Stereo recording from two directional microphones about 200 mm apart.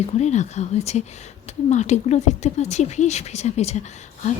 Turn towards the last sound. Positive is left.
turn(degrees=35)  # may be behind; listen again after turning